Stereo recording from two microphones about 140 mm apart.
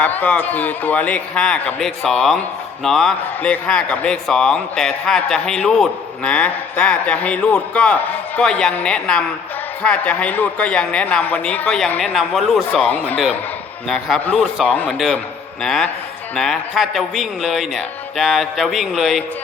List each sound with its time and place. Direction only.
0.0 s a man's voice: 10° left (ahead or behind)
12.1 s a man's voice: centre (ahead or behind)
12.7 s a man's voice: 10° left (ahead or behind)
13.8 s a man's voice: centre (ahead or behind)
14.9 s a man's voice: centre (ahead or behind)